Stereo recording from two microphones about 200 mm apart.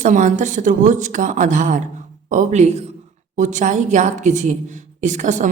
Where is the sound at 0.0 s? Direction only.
40° right (ahead or behind).